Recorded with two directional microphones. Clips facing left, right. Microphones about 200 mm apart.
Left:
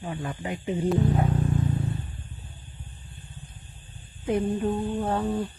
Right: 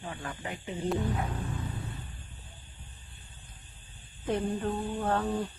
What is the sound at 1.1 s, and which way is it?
Music, 30° left (ahead or behind).